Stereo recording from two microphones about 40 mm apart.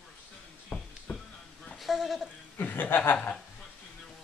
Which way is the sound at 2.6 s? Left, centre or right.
Left.